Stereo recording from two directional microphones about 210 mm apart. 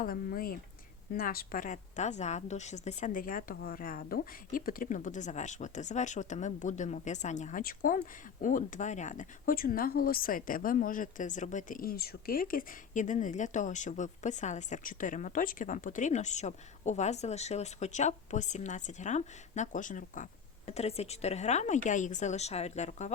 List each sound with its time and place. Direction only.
0.0 s a woman's voice: 45° left (ahead or behind)